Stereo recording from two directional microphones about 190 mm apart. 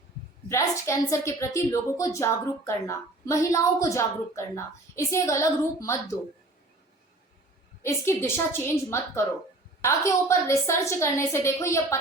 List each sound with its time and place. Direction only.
0.4 s a woman's voice: 15° left (ahead or behind)
7.8 s a woman's voice: 15° left (ahead or behind)